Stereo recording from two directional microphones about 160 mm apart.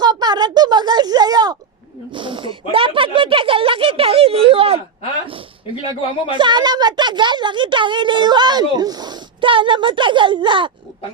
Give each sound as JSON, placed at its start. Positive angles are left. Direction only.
{"t": 0.0, "sound": "speech", "side_deg": -25}
{"t": 6.3, "sound": "a woman's voice", "side_deg": -30}